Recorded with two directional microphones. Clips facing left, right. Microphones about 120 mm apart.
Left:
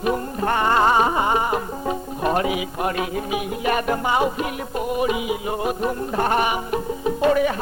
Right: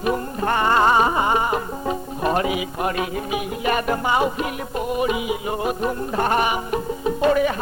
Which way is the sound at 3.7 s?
10° left (ahead or behind).